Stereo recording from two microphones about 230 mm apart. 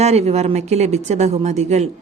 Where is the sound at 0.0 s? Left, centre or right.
Right.